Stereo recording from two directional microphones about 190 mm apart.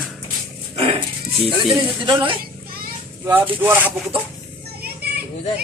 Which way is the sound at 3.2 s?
10° right (ahead or behind).